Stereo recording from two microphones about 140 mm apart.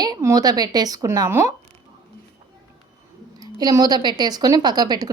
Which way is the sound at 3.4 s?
25° right (ahead or behind).